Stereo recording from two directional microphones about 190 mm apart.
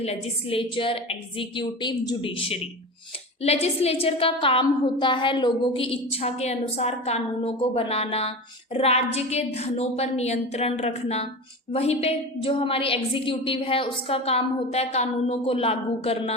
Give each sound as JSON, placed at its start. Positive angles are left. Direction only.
{"t": 0.0, "sound": "a woman's voice", "side_deg": 30}